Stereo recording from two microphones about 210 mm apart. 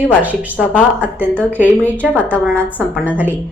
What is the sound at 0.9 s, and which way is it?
Speech, 5° right (ahead or behind).